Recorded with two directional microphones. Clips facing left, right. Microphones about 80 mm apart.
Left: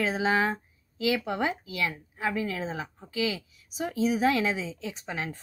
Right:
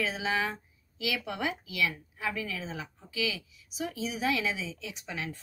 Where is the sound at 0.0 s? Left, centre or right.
Left.